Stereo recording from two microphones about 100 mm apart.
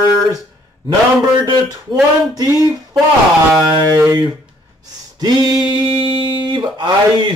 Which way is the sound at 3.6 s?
40° right (ahead or behind).